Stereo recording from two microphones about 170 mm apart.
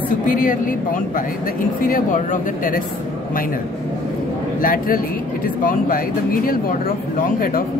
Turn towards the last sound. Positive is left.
turn(degrees=55)  # may be behind; listen again after turning